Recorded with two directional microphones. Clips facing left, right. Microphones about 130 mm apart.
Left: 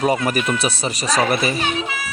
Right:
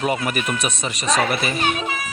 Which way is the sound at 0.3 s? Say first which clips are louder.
Left 3 dB; 35° left (ahead or behind).